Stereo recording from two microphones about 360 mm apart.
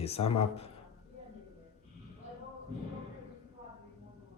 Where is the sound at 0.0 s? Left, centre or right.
Centre.